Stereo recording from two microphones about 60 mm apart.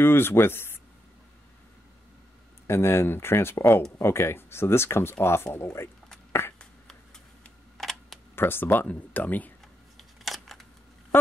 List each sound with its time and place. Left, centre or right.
0.0 s speech: left
2.6 s speech: left
7.7 s computer keyboard: centre
8.4 s speech: left
9.9 s camera: centre